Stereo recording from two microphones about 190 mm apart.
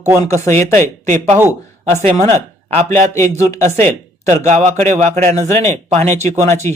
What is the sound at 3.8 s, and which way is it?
Speech, 35° right (ahead or behind).